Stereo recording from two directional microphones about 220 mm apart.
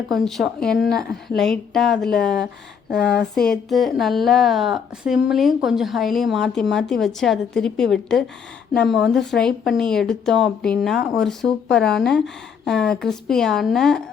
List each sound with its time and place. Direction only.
0.1 s speech: centre (ahead or behind)